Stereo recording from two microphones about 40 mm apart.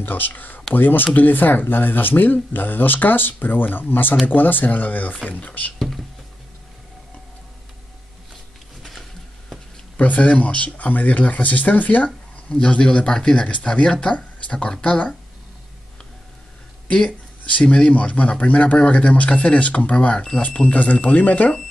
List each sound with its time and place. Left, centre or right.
0.0 s speech: left
5.8 s speech: centre
9.9 s speech: left
12.5 s speech: left
13.5 s speech: left
13.8 s speech: left
17.6 s speech: left
20.6 s speech: left